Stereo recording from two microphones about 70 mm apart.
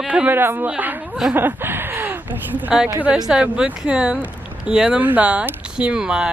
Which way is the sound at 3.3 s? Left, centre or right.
Centre.